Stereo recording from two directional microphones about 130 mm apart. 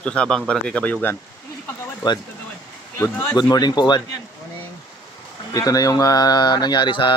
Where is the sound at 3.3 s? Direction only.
30° left (ahead or behind).